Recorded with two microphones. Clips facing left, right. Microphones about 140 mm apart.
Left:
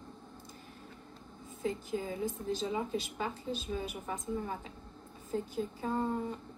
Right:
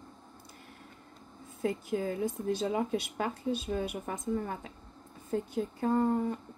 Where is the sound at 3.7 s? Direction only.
60° right (ahead or behind).